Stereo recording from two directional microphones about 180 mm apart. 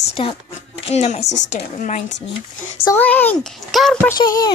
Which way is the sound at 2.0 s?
80° left.